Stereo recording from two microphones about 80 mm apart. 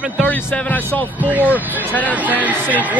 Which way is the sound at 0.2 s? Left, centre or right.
Left.